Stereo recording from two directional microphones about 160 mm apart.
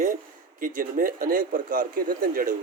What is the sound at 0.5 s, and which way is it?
Speech, 60° right (ahead or behind).